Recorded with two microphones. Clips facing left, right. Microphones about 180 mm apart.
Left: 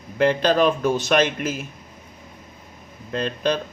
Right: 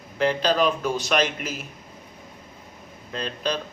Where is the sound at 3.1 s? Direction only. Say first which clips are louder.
Left 5 dB; 50° left (ahead or behind).